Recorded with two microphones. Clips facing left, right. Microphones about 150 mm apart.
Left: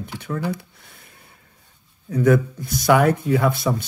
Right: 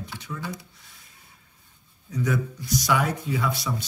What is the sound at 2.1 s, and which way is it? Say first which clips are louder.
Speech: left 10 dB; 55° left (ahead or behind).